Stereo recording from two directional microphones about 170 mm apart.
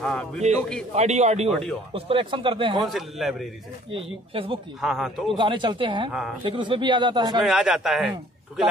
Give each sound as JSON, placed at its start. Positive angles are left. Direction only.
{"t": 0.0, "sound": "a man's voice", "side_deg": 5}
{"t": 0.9, "sound": "speech", "side_deg": -40}
{"t": 1.5, "sound": "a man's voice", "side_deg": 5}
{"t": 2.0, "sound": "speech", "side_deg": -30}
{"t": 2.8, "sound": "a man's voice", "side_deg": 0}
{"t": 3.9, "sound": "speech", "side_deg": -30}
{"t": 4.8, "sound": "a man's voice", "side_deg": 0}
{"t": 5.3, "sound": "speech", "side_deg": -30}
{"t": 7.4, "sound": "a man's voice", "side_deg": -5}